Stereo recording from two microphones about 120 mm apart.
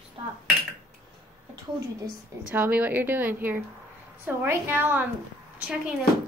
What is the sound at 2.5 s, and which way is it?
A woman's voice, 15° right (ahead or behind).